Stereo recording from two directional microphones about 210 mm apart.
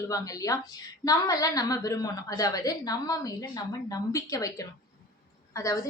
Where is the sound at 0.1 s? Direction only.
15° left (ahead or behind).